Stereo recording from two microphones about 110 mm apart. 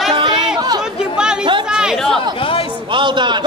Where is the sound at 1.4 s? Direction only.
45° right (ahead or behind).